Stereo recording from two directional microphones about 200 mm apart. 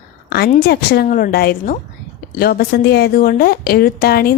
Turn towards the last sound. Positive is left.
turn(degrees=50)  # may be behind; listen again after turning